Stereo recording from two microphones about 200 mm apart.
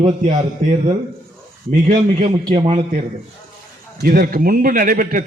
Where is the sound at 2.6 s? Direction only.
25° right (ahead or behind).